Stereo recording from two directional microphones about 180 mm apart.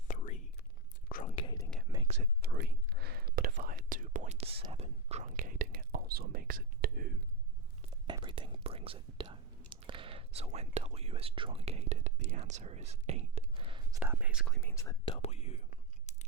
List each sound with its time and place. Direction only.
0.1 s whispering: 45° left (ahead or behind)
1.4 s whispering: 25° left (ahead or behind)
2.0 s whispering: 40° right (ahead or behind)
2.4 s whispering: 65° right (ahead or behind); by 7.2 s 50° right (ahead or behind)
7.8 s whispering: 25° right (ahead or behind)
14.0 s whispering: 10° right (ahead or behind)
14.4 s whispering: 5° left (ahead or behind)
15.1 s whispering: 35° left (ahead or behind)